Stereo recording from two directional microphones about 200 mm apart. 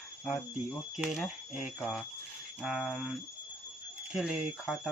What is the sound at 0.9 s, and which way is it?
Speech, centre (ahead or behind).